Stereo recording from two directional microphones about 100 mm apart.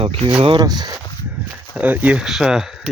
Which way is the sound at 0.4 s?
45° right (ahead or behind).